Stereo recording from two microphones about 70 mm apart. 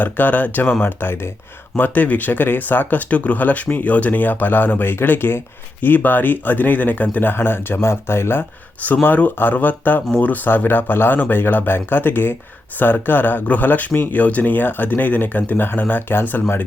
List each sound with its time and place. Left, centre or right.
0.0 s speech: left
1.7 s speech: left